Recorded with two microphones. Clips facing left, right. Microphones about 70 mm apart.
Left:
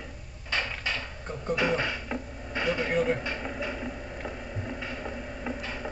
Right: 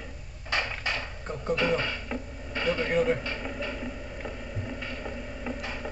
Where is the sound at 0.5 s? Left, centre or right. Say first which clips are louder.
Right 1 dB; right.